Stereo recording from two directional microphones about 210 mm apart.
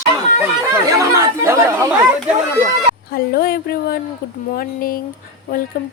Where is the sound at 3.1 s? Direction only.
45° left (ahead or behind).